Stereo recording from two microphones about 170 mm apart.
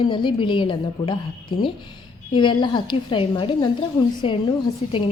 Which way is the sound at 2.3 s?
25° left (ahead or behind).